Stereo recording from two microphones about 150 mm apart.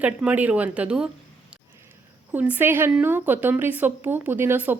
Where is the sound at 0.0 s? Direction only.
10° right (ahead or behind).